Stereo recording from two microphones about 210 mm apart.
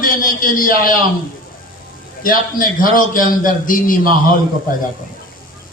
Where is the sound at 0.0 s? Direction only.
40° left (ahead or behind).